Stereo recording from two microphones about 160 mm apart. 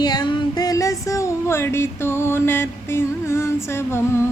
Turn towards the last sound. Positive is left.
turn(degrees=15)  # may be behind; listen again after turning